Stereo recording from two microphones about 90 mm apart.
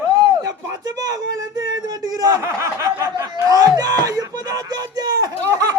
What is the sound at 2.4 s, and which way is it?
Speech, 30° right (ahead or behind).